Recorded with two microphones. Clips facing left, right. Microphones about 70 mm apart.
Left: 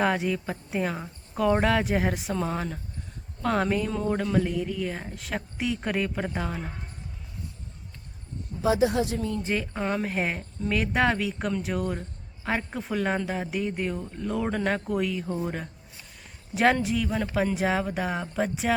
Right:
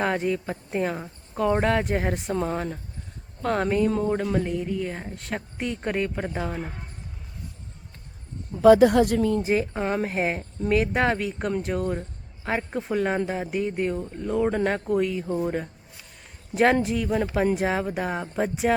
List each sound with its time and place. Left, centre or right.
0.0 s a woman's voice: centre
8.6 s speech: right
9.4 s a woman's voice: centre
14.2 s a woman's voice: centre
16.8 s a woman's voice: centre